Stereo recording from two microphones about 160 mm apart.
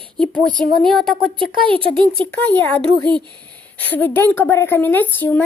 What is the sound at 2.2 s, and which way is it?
A woman's voice, 10° left (ahead or behind).